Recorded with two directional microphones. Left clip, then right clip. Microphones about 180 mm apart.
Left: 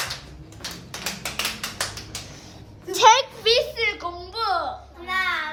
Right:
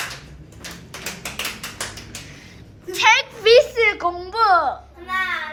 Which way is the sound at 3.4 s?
10° left (ahead or behind).